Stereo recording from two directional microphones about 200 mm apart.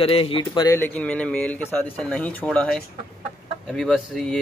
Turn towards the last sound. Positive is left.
turn(degrees=0)  # may be behind; listen again after turning